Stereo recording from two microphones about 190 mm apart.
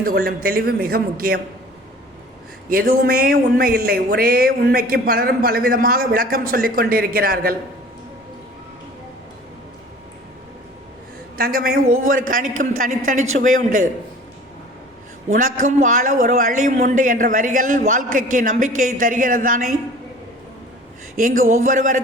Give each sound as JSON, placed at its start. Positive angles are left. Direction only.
{"t": 0.0, "sound": "speech", "side_deg": -50}
{"t": 2.6, "sound": "speech", "side_deg": -50}
{"t": 11.3, "sound": "speech", "side_deg": -50}
{"t": 15.3, "sound": "speech", "side_deg": -45}
{"t": 21.2, "sound": "speech", "side_deg": -45}